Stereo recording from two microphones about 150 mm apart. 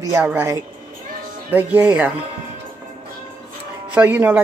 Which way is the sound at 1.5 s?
10° right (ahead or behind).